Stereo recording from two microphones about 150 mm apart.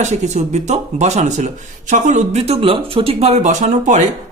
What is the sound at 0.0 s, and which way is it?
Speech, 50° right (ahead or behind).